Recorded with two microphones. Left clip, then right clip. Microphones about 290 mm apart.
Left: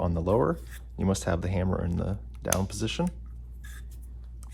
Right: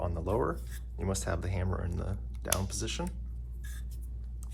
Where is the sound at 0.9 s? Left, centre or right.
Left.